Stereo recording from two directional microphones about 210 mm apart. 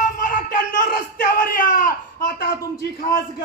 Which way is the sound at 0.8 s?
40° left (ahead or behind).